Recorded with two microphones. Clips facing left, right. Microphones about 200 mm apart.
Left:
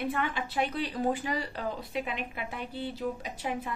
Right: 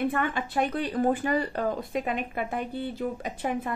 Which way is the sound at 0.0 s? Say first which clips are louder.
Right 4 dB; 50° right (ahead or behind).